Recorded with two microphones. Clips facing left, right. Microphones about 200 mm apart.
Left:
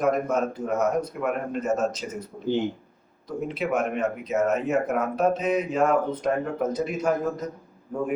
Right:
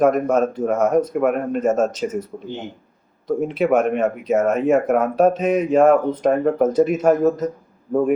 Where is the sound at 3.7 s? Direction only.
45° right (ahead or behind).